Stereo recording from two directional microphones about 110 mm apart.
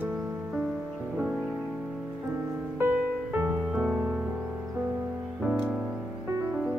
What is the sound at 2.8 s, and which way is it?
Music, 15° right (ahead or behind).